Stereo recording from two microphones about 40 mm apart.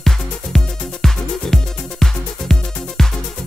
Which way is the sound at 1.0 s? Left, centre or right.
Centre.